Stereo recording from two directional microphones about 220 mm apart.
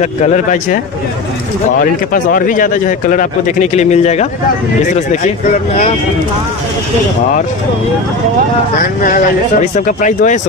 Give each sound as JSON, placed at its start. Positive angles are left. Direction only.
{"t": 0.0, "sound": "speech", "side_deg": 30}
{"t": 2.1, "sound": "speech", "side_deg": 40}
{"t": 8.7, "sound": "speech", "side_deg": 40}